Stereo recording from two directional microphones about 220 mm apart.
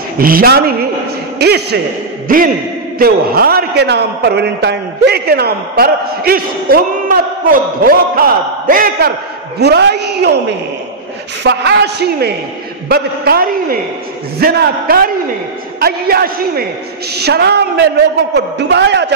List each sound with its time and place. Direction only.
0.2 s a man's voice: 40° right (ahead or behind)
11.4 s a man's voice: 50° right (ahead or behind)